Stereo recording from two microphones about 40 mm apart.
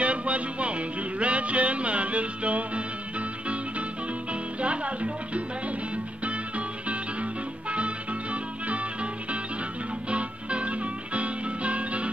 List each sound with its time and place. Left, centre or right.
0.0 s music: right